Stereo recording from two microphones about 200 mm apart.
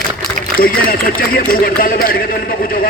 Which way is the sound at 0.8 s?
45° left (ahead or behind).